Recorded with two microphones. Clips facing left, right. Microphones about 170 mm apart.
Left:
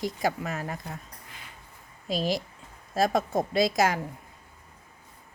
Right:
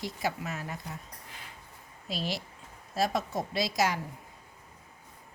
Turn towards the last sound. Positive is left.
turn(degrees=50)  # may be behind; listen again after turning